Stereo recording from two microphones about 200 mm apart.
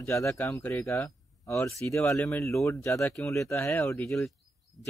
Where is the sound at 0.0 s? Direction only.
15° left (ahead or behind).